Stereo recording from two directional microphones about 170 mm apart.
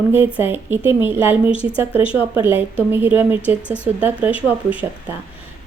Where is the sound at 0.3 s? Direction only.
10° right (ahead or behind).